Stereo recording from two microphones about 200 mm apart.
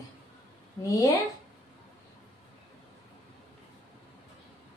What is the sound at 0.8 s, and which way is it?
Speech, 15° left (ahead or behind).